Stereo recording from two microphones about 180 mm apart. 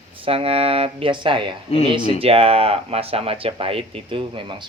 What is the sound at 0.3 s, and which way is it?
Speech, 30° right (ahead or behind).